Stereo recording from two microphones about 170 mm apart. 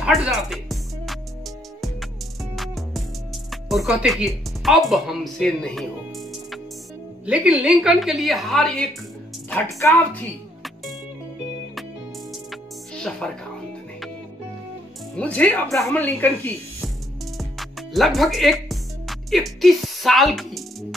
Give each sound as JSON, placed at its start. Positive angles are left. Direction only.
{"t": 0.0, "sound": "music", "side_deg": -5}
{"t": 2.5, "sound": "music", "side_deg": 0}
{"t": 3.4, "sound": "a woman's voice", "side_deg": 0}
{"t": 9.7, "sound": "speech", "side_deg": 20}
{"t": 12.3, "sound": "music", "side_deg": 0}
{"t": 15.1, "sound": "speech", "side_deg": 10}
{"t": 17.4, "sound": "music", "side_deg": 0}